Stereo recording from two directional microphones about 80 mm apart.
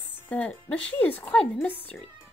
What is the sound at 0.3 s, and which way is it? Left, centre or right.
Speech, centre.